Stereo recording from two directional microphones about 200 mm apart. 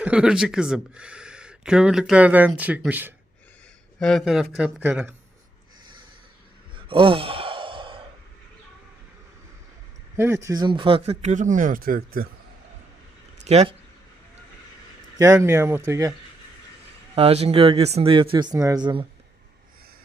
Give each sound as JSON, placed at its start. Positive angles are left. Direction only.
{"t": 0.0, "sound": "speech", "side_deg": -5}
{"t": 6.7, "sound": "sigh", "side_deg": -25}
{"t": 10.2, "sound": "speech", "side_deg": -15}
{"t": 13.4, "sound": "speech", "side_deg": -30}
{"t": 15.2, "sound": "speech", "side_deg": -15}
{"t": 17.2, "sound": "speech", "side_deg": -30}